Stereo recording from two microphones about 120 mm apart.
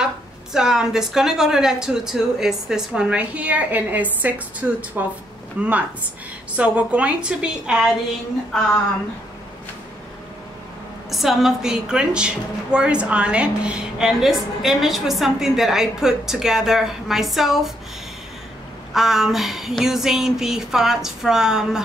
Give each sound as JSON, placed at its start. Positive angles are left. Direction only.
{"t": 0.0, "sound": "a woman's voice", "side_deg": -5}
{"t": 11.1, "sound": "a woman's voice", "side_deg": 0}
{"t": 18.9, "sound": "a woman's voice", "side_deg": -5}